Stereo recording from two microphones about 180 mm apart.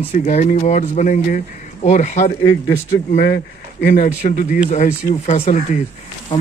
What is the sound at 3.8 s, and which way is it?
Speech, 45° left (ahead or behind).